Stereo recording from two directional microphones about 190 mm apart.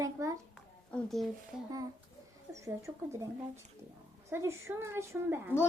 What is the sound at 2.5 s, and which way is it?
Speech, 15° right (ahead or behind).